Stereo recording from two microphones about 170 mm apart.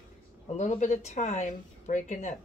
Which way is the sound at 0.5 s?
45° left (ahead or behind).